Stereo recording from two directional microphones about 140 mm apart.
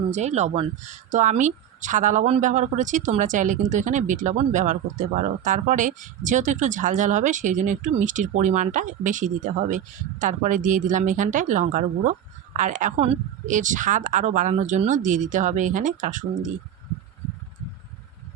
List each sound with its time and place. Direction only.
0.1 s speech: 55° right (ahead or behind)